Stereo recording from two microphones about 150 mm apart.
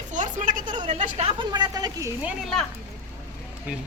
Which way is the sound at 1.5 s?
25° right (ahead or behind).